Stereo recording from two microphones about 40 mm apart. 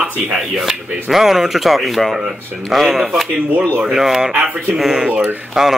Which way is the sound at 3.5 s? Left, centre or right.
Right.